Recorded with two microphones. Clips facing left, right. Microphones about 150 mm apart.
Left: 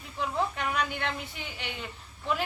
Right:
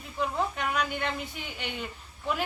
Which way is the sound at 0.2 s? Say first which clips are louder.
Right 1 dB; 5° right (ahead or behind).